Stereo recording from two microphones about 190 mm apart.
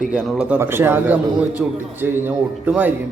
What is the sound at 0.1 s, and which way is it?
A man's voice, 5° right (ahead or behind).